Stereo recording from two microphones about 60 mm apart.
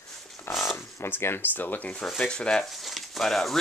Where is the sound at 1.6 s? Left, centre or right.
Left.